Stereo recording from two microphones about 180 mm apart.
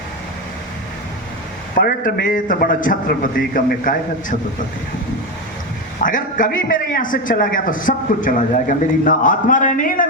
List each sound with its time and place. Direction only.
1.7 s a man's voice: 55° left (ahead or behind)
6.0 s a man's voice: 45° left (ahead or behind)